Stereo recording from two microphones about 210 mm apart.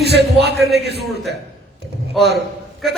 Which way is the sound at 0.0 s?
50° right (ahead or behind).